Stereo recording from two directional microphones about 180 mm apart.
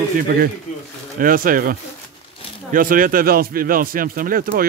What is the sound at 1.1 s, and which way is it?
Speech, 50° right (ahead or behind).